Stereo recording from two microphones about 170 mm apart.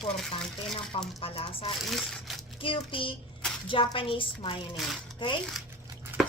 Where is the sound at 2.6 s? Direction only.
30° left (ahead or behind).